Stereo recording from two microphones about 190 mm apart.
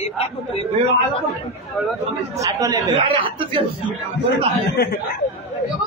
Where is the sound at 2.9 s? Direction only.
30° right (ahead or behind).